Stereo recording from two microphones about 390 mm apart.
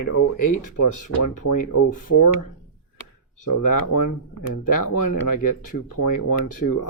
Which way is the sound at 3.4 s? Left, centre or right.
Left.